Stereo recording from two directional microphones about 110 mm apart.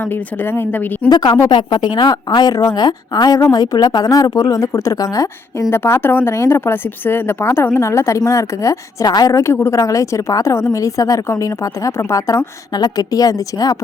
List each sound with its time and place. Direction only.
0.0 s speech: 20° left (ahead or behind)
1.1 s speech: 40° left (ahead or behind)